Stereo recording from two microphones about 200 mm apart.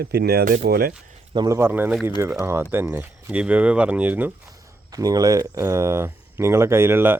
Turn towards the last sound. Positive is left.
turn(degrees=-10)  # may be behind; listen again after turning